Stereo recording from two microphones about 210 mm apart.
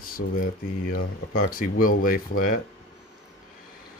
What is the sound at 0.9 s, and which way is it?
Speech, 45° left (ahead or behind).